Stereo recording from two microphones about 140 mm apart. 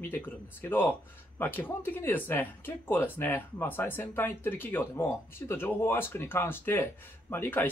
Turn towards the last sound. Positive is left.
turn(degrees=15)  # may be behind; listen again after turning